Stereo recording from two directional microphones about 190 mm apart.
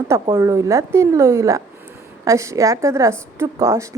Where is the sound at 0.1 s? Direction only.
20° right (ahead or behind).